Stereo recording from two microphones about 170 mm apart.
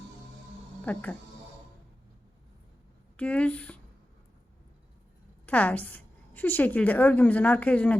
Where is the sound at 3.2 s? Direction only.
5° left (ahead or behind).